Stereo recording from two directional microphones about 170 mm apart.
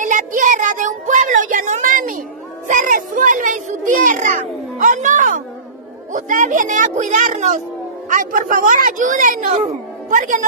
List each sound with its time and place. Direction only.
0.0 s child singing: 50° right (ahead or behind)
2.7 s a child's voice: 50° right (ahead or behind)